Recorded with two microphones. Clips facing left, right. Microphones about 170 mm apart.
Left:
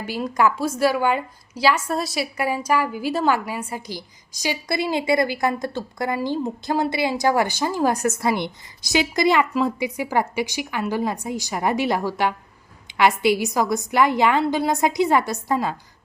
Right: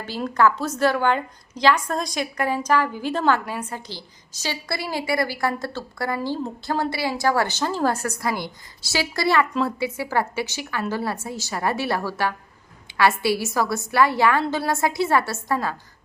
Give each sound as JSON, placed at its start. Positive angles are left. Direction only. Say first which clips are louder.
{"t": 0.0, "sound": "a woman's voice", "louder": "even", "side_deg": 10}